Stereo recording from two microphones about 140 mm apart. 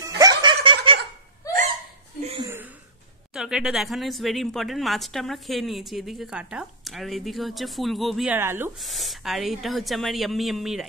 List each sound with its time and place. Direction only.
0.0 s snicker: 25° right (ahead or behind)
1.5 s hiccup: 25° left (ahead or behind)
2.4 s a sound: 15° right (ahead or behind)
3.3 s speech: 5° right (ahead or behind)
8.3 s speech: 15° right (ahead or behind)
8.7 s speech: centre (ahead or behind)